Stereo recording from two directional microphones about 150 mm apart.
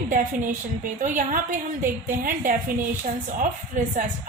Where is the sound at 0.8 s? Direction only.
60° right (ahead or behind).